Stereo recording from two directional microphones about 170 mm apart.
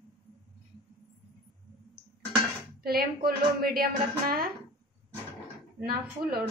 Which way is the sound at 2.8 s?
65° right (ahead or behind).